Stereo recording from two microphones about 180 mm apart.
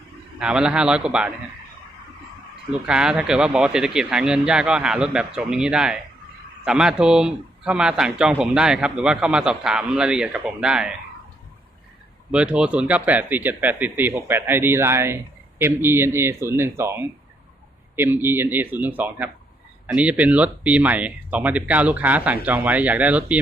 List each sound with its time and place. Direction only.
0.3 s speech: 5° right (ahead or behind)
2.8 s speech: 5° right (ahead or behind)
12.3 s speech: 5° right (ahead or behind)